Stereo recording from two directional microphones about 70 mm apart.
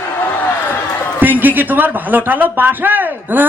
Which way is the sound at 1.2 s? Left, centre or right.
Right.